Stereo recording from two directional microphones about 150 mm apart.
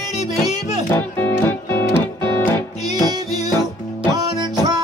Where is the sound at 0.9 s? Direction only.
15° left (ahead or behind).